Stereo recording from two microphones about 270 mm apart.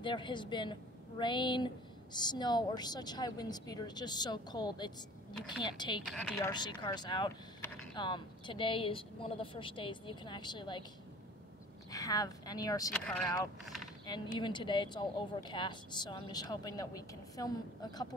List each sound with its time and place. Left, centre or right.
0.0 s speech: centre
6.0 s speech: centre
6.5 s speech: centre
11.9 s speech: centre